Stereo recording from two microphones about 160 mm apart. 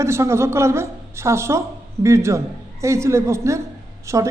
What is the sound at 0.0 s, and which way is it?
A woman's voice, 15° right (ahead or behind).